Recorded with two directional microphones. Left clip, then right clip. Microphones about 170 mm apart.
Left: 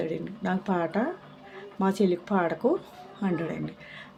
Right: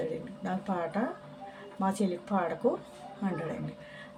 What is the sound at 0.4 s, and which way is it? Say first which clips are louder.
Speech: left 5 dB; 35° left (ahead or behind).